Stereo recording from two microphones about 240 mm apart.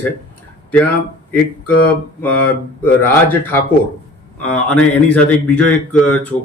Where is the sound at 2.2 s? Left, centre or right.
Centre.